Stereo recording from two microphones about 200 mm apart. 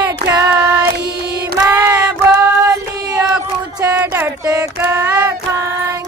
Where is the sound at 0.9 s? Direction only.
50° right (ahead or behind).